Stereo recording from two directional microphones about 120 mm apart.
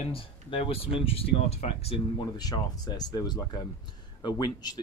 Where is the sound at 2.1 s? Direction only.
35° left (ahead or behind).